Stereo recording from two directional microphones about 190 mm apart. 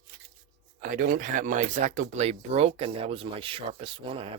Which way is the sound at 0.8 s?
45° right (ahead or behind).